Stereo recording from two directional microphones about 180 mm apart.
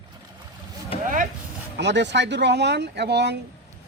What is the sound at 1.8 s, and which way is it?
Speech, 75° right (ahead or behind).